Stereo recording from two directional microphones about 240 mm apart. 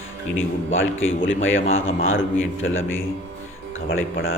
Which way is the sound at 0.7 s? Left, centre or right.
Left.